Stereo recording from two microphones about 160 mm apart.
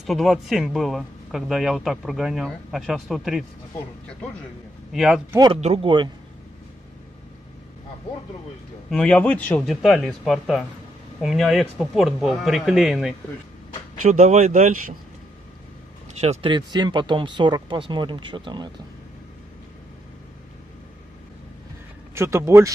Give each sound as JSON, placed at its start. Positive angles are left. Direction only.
{"t": 0.0, "sound": "speech", "side_deg": 0}
{"t": 4.9, "sound": "speech", "side_deg": 0}
{"t": 5.5, "sound": "speech", "side_deg": -40}
{"t": 8.9, "sound": "speech", "side_deg": 5}
{"t": 14.0, "sound": "speech", "side_deg": -50}
{"t": 16.2, "sound": "speech", "side_deg": -45}
{"t": 16.4, "sound": "speech", "side_deg": -25}
{"t": 22.1, "sound": "a man's voice", "side_deg": -15}